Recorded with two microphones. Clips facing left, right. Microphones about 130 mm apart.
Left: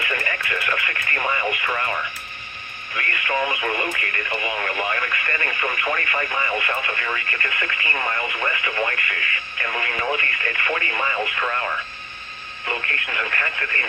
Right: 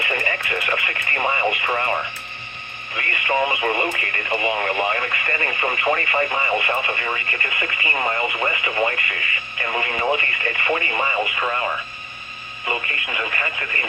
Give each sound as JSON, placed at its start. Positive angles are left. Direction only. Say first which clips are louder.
{"t": 0.0, "sound": "speech", "louder": "right 2 dB", "side_deg": -25}